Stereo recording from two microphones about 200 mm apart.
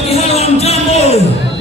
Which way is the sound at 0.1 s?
30° left (ahead or behind).